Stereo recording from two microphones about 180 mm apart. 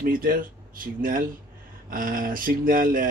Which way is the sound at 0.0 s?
50° right (ahead or behind).